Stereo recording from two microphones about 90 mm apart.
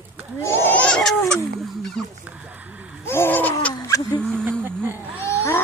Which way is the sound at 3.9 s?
40° left (ahead or behind).